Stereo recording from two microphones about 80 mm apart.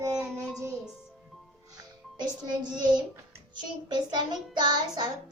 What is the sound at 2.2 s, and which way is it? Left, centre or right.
Child singing, right.